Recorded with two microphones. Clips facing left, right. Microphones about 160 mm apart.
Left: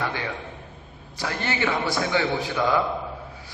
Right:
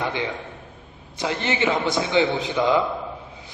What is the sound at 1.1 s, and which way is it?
A man's voice, 20° right (ahead or behind).